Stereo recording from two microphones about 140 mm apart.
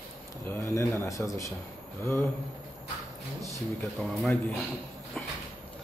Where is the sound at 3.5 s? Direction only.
Centre (ahead or behind).